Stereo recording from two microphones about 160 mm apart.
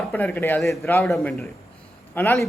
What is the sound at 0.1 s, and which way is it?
Speech, 10° left (ahead or behind).